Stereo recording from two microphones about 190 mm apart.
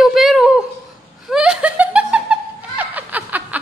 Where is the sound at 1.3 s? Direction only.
5° right (ahead or behind).